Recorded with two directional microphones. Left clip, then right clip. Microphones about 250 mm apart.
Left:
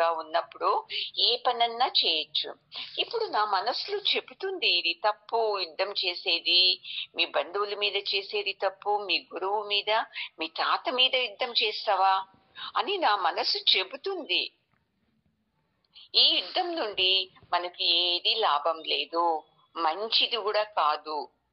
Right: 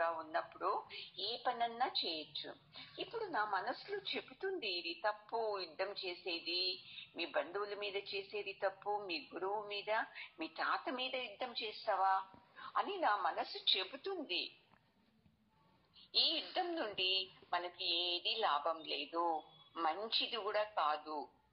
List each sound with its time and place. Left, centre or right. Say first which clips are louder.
0.0 s speech: left 12 dB; left
16.0 s a woman's voice: left 13 dB; left